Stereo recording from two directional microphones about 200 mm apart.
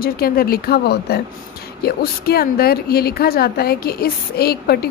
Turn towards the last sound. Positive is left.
turn(degrees=50)  # may be behind; listen again after turning